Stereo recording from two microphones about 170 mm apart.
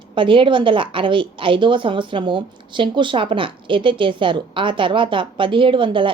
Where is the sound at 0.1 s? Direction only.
30° right (ahead or behind).